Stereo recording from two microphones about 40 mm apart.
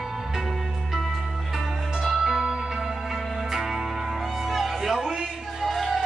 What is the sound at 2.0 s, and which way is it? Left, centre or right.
Music, centre.